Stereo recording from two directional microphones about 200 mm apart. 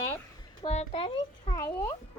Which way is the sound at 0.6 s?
30° left (ahead or behind).